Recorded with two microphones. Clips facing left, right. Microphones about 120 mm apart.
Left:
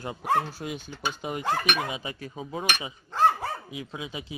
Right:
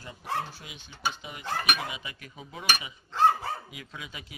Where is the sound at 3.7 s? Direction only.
25° left (ahead or behind).